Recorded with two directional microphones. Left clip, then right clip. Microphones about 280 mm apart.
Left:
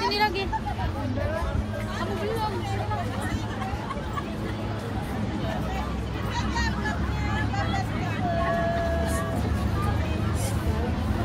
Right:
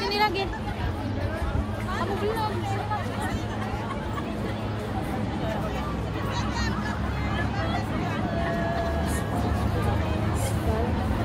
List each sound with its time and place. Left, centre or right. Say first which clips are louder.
0.1 s vehicle: even; right